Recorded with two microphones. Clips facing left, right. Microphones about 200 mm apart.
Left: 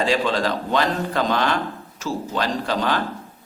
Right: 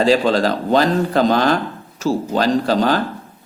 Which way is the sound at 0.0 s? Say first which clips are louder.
Right 6 dB; 35° right (ahead or behind).